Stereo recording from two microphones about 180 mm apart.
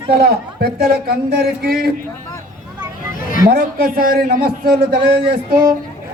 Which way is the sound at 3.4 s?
55° right (ahead or behind).